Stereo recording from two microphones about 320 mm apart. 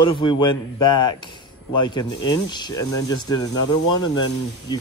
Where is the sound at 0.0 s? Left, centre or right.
Centre.